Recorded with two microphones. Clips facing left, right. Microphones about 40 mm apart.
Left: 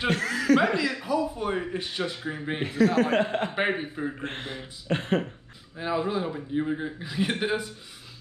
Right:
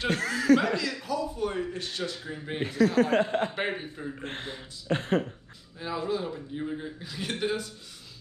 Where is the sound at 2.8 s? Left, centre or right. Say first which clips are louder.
Left 1 dB; left.